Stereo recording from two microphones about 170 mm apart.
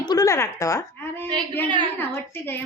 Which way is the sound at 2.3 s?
15° left (ahead or behind).